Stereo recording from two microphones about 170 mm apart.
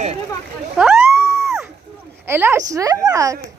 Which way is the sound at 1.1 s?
15° right (ahead or behind).